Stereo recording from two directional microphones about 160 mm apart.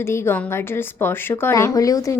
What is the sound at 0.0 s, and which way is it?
A woman's voice, 15° left (ahead or behind).